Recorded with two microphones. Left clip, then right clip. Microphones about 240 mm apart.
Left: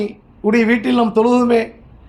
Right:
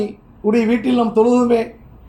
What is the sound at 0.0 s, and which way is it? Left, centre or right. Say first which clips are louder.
A man's voice: even; left.